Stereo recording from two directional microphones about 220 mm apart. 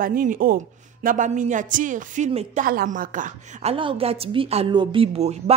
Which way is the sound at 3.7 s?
25° right (ahead or behind).